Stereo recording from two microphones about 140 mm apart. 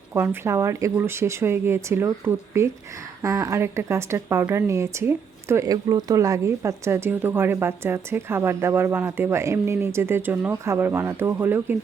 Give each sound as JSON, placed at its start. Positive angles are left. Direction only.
{"t": 0.1, "sound": "speech", "side_deg": -20}